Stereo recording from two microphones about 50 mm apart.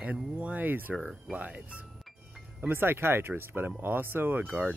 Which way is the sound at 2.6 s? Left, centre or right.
Right.